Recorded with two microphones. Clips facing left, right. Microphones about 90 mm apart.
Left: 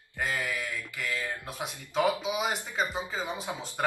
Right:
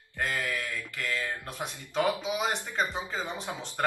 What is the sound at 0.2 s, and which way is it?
Speech, 15° left (ahead or behind).